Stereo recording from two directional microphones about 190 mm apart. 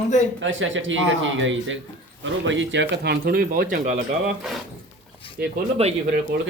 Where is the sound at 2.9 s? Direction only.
60° right (ahead or behind).